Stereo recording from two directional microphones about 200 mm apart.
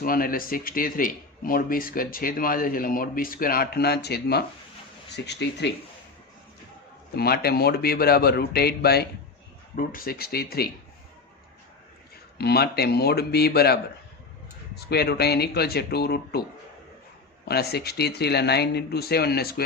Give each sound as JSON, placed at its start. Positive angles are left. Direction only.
{"t": 0.0, "sound": "speech", "side_deg": 45}
{"t": 7.2, "sound": "speech", "side_deg": 50}
{"t": 12.4, "sound": "speech", "side_deg": 55}
{"t": 14.8, "sound": "speech", "side_deg": 55}
{"t": 17.4, "sound": "speech", "side_deg": 50}